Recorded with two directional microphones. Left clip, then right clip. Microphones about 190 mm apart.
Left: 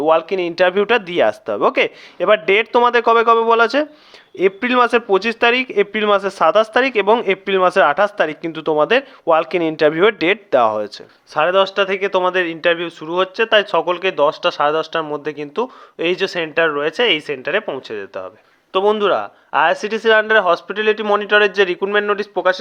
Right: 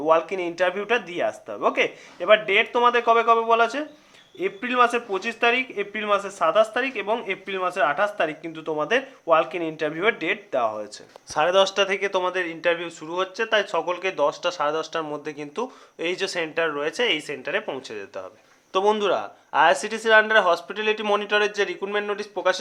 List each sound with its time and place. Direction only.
0.0 s speech: 40° left (ahead or behind)
11.3 s speech: 15° left (ahead or behind)